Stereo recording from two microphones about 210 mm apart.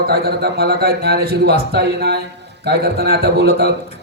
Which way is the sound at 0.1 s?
50° right (ahead or behind).